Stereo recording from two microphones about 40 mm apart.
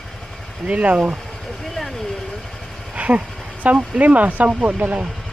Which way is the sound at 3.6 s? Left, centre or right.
Right.